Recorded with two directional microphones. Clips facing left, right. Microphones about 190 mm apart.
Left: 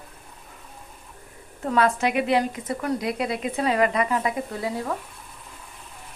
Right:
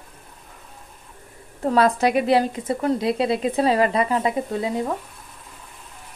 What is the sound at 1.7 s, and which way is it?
Speech, 35° right (ahead or behind).